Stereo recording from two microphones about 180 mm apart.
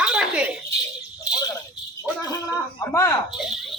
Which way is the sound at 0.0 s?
5° right (ahead or behind).